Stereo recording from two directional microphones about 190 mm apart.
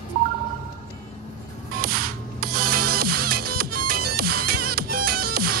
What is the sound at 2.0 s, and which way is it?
Music, 50° right (ahead or behind).